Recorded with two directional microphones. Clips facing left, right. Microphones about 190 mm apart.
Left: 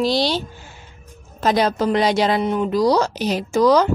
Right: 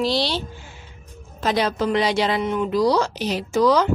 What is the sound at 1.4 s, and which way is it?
Speech, 40° left (ahead or behind).